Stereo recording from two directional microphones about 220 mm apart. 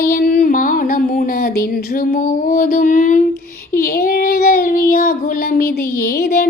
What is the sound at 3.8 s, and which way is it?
Child singing, 45° left (ahead or behind).